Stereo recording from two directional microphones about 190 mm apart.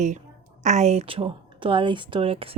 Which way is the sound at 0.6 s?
35° right (ahead or behind).